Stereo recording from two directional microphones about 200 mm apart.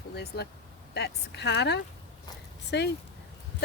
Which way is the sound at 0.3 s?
55° left (ahead or behind).